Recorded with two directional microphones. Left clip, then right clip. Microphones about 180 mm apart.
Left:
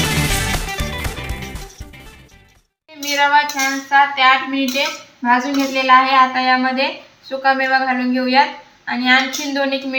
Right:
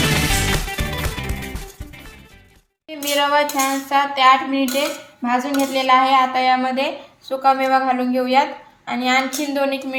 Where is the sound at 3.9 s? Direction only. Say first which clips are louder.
Left 2 dB; 45° right (ahead or behind).